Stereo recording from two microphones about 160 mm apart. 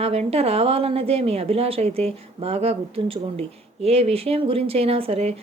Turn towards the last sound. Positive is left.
turn(degrees=-40)  # may be behind; listen again after turning